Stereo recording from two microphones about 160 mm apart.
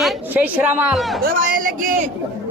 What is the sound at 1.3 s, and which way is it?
Speech, 60° right (ahead or behind).